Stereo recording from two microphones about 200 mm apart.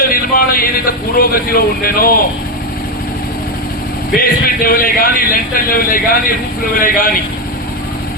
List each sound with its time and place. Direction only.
0.1 s a man's voice: 45° left (ahead or behind)
4.2 s a man's voice: 45° left (ahead or behind)